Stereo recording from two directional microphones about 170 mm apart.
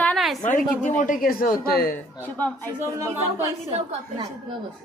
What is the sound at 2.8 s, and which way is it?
Speech, 15° right (ahead or behind).